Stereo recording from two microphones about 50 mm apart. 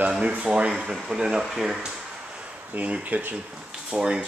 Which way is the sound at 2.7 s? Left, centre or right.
Right.